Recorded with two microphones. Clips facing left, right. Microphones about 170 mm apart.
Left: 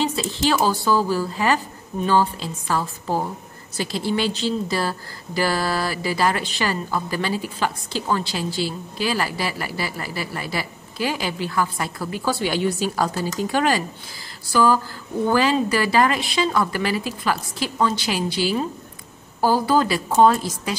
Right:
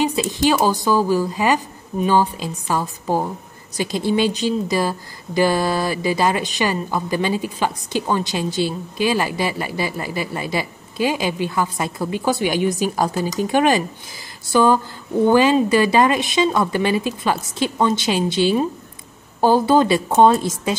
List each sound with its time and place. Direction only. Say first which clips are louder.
0.0 s a woman's voice: right 4 dB; 15° right (ahead or behind)